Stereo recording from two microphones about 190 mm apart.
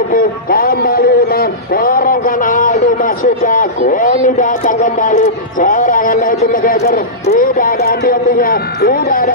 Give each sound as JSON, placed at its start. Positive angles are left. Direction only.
{"t": 0.1, "sound": "a man's voice", "side_deg": 50}